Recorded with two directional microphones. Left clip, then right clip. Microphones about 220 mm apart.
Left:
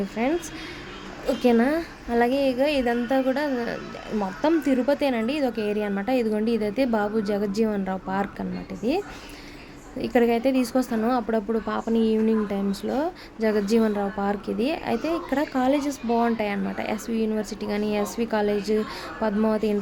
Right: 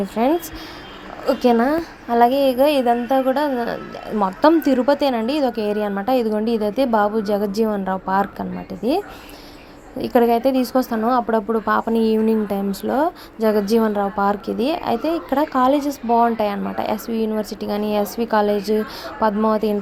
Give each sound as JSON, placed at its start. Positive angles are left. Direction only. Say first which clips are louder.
{"t": 0.2, "sound": "a woman's voice", "louder": "right 7 dB", "side_deg": -15}
{"t": 10.0, "sound": "speech", "louder": "right 5 dB", "side_deg": -5}